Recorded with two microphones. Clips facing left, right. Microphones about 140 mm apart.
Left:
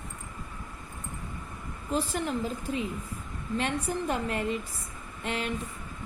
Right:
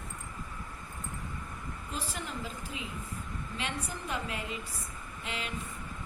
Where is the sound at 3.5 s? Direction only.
50° left (ahead or behind).